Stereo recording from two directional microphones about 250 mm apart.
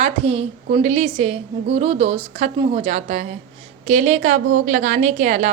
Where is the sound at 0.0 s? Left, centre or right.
Right.